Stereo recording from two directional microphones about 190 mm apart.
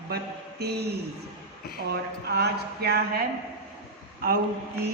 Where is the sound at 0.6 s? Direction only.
60° right (ahead or behind).